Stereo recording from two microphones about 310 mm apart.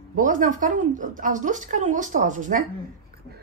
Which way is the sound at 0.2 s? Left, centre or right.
Right.